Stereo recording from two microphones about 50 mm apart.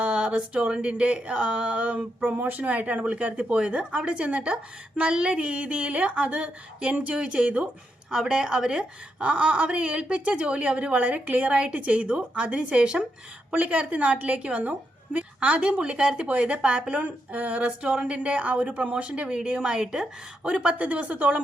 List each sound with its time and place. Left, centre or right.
0.0 s a woman's voice: right
9.3 s a woman's voice: right
13.5 s a woman's voice: right